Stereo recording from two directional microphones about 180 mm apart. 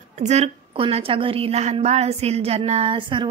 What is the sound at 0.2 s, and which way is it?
A woman's voice, 40° right (ahead or behind).